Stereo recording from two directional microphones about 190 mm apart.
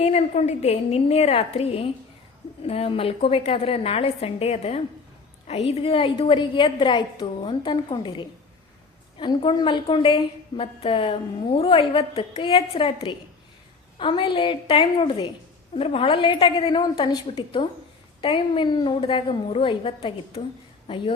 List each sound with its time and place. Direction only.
0.0 s a woman's voice: 35° left (ahead or behind)